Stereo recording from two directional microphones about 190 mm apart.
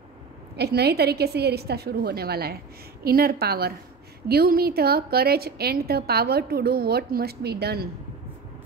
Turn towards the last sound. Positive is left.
turn(degrees=-55)  # may be behind; listen again after turning